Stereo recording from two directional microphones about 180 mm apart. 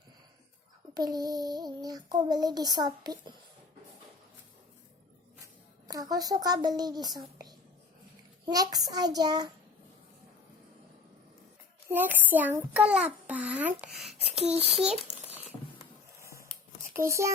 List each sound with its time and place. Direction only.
0.9 s a child's voice: 20° right (ahead or behind)
5.9 s a child's voice: 20° right (ahead or behind)
11.9 s a child's voice: 10° right (ahead or behind)
14.4 s a child's voice: 35° right (ahead or behind)
16.1 s a sound: 15° right (ahead or behind)
17.1 s a child's voice: 15° right (ahead or behind)